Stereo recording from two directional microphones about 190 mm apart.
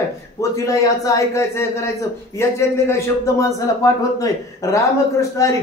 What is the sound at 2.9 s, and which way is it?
A man's voice, 15° left (ahead or behind).